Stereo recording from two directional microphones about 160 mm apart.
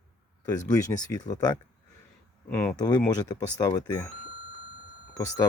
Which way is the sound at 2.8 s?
25° left (ahead or behind).